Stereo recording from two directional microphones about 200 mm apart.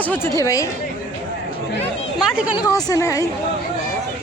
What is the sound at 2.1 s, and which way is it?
Speech, 5° right (ahead or behind).